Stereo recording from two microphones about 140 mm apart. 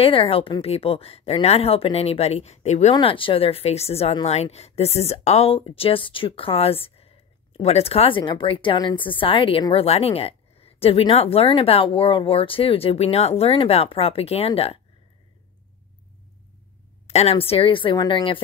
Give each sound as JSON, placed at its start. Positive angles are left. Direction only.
{"t": 0.0, "sound": "a woman's voice", "side_deg": 40}
{"t": 2.9, "sound": "a woman's voice", "side_deg": 40}
{"t": 17.1, "sound": "speech", "side_deg": 50}